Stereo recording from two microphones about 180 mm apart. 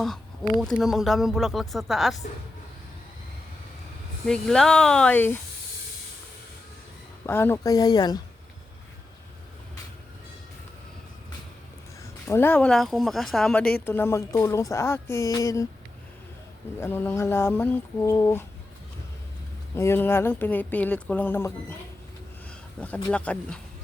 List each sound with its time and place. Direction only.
0.6 s speech: centre (ahead or behind)
4.3 s speech: 5° left (ahead or behind)
7.3 s speech: 15° left (ahead or behind)
12.3 s speech: 10° left (ahead or behind)
16.8 s speech: 10° left (ahead or behind)
19.7 s speech: 15° left (ahead or behind)
22.8 s speech: 5° left (ahead or behind)